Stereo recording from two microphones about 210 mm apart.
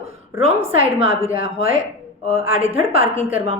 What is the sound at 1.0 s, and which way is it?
A woman's voice, 30° right (ahead or behind).